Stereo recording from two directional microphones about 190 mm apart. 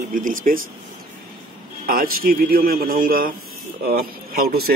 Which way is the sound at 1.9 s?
50° right (ahead or behind).